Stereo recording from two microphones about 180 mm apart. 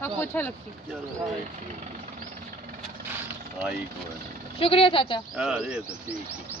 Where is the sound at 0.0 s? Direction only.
10° left (ahead or behind).